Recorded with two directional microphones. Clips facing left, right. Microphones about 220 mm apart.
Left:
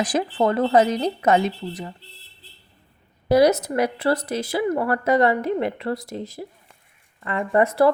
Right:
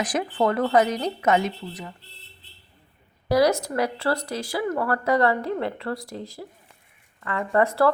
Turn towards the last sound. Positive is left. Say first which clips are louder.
# left 3 dB
turn(degrees=20)  # may be behind; listen again after turning